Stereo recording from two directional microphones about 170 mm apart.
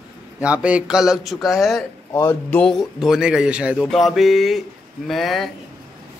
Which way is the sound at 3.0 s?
5° right (ahead or behind).